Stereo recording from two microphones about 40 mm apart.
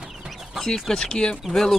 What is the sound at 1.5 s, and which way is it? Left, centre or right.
Speech, centre.